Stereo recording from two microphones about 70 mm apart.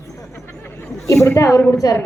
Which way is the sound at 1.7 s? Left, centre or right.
Left.